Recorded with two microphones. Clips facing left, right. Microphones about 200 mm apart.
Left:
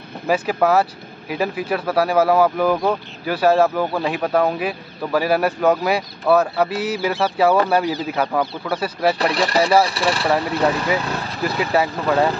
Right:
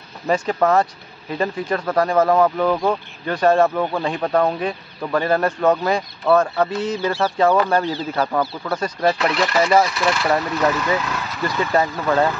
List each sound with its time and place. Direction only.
0.3 s speech: 5° left (ahead or behind)
9.2 s speech: 35° left (ahead or behind)
11.7 s speech: 5° left (ahead or behind)